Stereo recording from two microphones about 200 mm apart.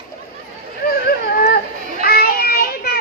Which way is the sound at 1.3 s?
50° left (ahead or behind).